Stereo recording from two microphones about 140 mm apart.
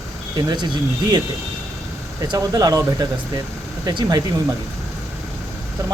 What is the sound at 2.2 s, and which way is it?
Speech, 30° right (ahead or behind).